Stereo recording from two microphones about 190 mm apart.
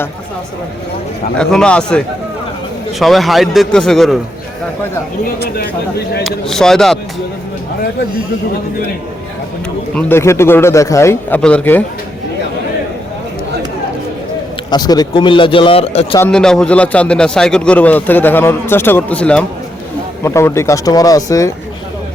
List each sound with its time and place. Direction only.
1.4 s a man's voice: 5° left (ahead or behind)
6.2 s a man's voice: 5° left (ahead or behind)
9.9 s a man's voice: 10° left (ahead or behind)
14.7 s a man's voice: 20° left (ahead or behind)
16.3 s a man's voice: 5° left (ahead or behind)